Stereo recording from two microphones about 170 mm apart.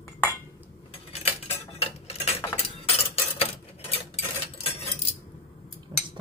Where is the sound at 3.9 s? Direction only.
35° left (ahead or behind).